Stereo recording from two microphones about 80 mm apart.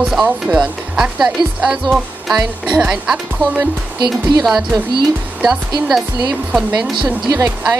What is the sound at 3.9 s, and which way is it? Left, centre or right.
Speech, right.